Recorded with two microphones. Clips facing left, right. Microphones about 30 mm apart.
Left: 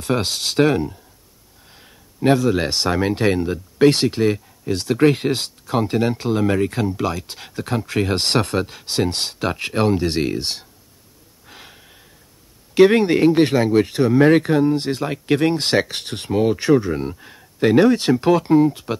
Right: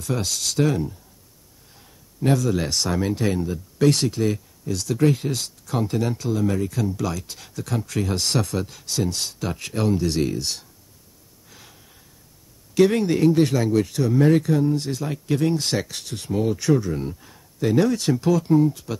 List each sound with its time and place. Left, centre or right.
0.0 s speech: left
11.4 s gasp: left
12.7 s speech: left